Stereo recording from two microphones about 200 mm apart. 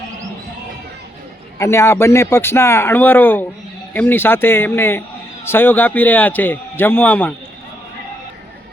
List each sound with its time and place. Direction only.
1.5 s speech: 15° left (ahead or behind)